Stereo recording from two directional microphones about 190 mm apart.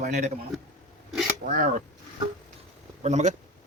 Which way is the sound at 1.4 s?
50° right (ahead or behind).